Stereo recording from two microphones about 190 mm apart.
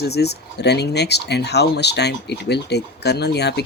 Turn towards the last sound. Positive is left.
turn(degrees=60)  # may be behind; listen again after turning